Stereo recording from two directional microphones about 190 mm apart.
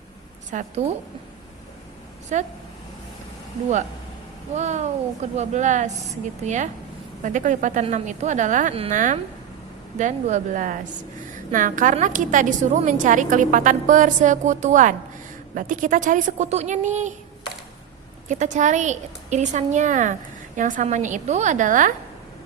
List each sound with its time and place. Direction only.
0.5 s a woman's voice: 35° right (ahead or behind)
2.3 s a woman's voice: 40° right (ahead or behind)
4.5 s a woman's voice: 35° right (ahead or behind)
18.3 s a woman's voice: 40° right (ahead or behind)